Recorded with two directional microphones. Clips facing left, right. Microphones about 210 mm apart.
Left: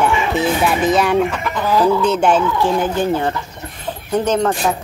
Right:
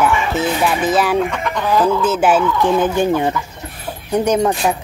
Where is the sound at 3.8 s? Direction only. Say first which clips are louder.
Right 1 dB; 10° right (ahead or behind).